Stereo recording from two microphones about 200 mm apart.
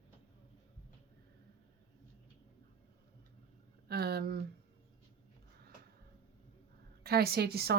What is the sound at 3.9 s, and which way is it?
Speech, 50° right (ahead or behind).